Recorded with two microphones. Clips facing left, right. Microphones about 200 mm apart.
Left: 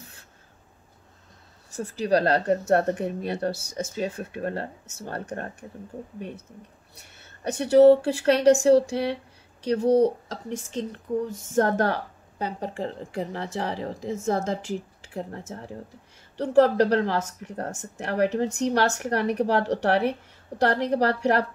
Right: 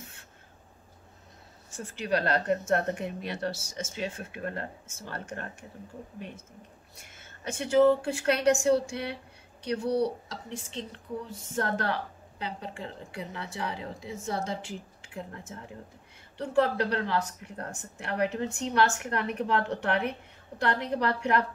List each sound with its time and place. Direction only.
1.7 s speech: 40° left (ahead or behind)
7.9 s speech: 35° left (ahead or behind)
9.8 s speech: 90° left
10.3 s speech: 45° left (ahead or behind)